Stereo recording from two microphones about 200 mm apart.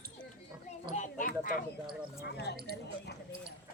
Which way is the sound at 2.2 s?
55° left (ahead or behind).